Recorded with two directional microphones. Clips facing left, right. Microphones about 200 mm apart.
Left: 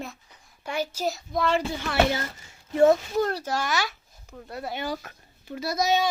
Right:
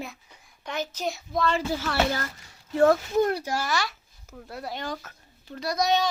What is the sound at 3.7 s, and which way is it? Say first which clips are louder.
A child's voice: even; centre (ahead or behind).